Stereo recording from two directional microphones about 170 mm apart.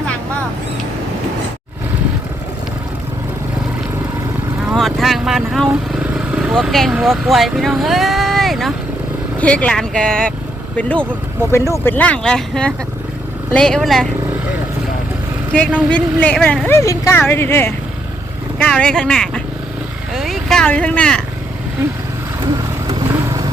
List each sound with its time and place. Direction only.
4.7 s vehicle: centre (ahead or behind)
9.4 s speech: 5° left (ahead or behind)
15.9 s speech: 10° left (ahead or behind)
23.0 s vehicle: 20° right (ahead or behind)